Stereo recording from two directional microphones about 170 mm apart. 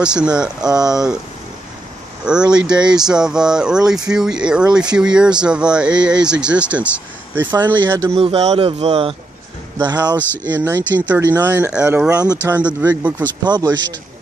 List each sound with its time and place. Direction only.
0.0 s speech: 5° right (ahead or behind)
2.2 s speech: 5° right (ahead or behind)
8.2 s speech: 35° right (ahead or behind)
9.8 s speech: 25° right (ahead or behind)
10.1 s speech: 10° left (ahead or behind)
10.5 s speech: 15° right (ahead or behind)
13.4 s speech: 25° right (ahead or behind)